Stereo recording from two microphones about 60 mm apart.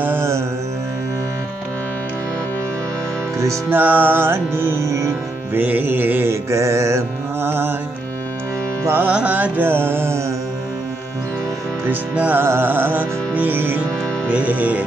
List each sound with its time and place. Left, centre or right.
3.7 s music: right
5.5 s music: right
6.2 s music: right
7.4 s music: right
9.0 s music: right
9.7 s music: right
11.9 s music: right
12.4 s music: right